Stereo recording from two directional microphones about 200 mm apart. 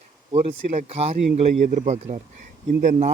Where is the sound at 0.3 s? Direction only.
35° right (ahead or behind).